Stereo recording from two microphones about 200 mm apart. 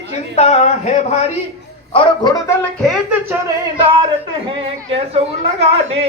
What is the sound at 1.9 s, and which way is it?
Speech, 25° left (ahead or behind).